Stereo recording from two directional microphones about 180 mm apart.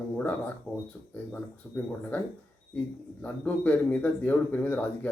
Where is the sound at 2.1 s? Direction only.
10° left (ahead or behind).